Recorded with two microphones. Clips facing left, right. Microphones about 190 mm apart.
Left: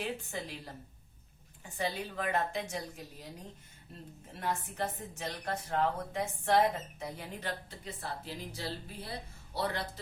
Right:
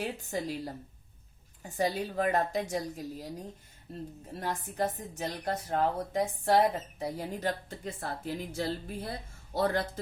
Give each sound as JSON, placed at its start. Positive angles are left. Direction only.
{"t": 0.0, "sound": "a woman's voice", "side_deg": -40}
{"t": 4.4, "sound": "a woman's voice", "side_deg": -35}